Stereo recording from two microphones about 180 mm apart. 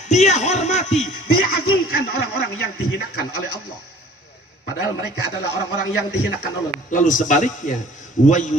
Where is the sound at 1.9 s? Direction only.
60° left (ahead or behind).